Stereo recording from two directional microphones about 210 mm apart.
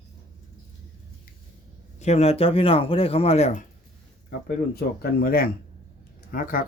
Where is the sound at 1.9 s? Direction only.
30° left (ahead or behind).